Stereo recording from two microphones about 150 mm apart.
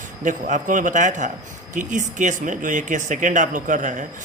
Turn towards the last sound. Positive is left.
turn(degrees=-55)  # may be behind; listen again after turning